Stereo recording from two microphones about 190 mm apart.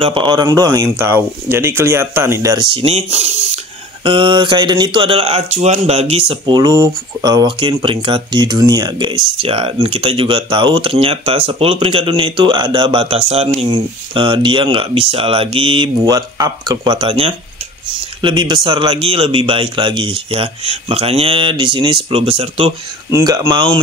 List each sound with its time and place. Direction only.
0.0 s a man's voice: 25° right (ahead or behind)
23.1 s speech: 15° right (ahead or behind)